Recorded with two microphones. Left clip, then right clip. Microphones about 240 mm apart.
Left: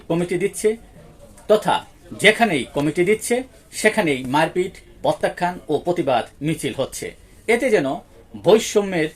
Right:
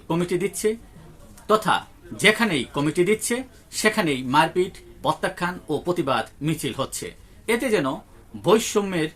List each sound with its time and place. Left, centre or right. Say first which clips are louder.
0.1 s speech: left 3 dB; centre